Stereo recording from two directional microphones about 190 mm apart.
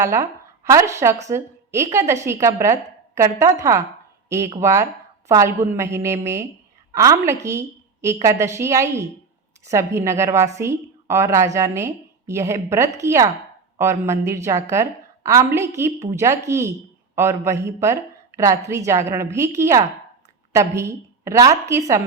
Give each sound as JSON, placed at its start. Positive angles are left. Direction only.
{"t": 0.0, "sound": "a woman's voice", "side_deg": -15}